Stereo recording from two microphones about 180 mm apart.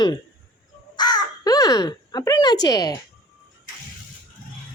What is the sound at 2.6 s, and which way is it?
Speech, 20° left (ahead or behind).